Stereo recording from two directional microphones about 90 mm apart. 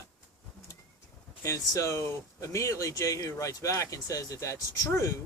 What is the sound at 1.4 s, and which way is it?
Speech, 35° left (ahead or behind).